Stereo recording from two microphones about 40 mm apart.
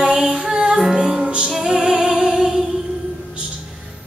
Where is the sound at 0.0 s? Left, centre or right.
Centre.